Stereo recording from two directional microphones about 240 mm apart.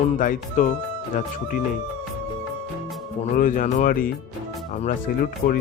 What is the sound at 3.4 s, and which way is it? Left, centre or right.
Speech, left.